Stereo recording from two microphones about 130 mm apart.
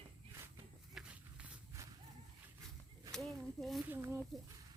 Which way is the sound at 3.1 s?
Centre (ahead or behind).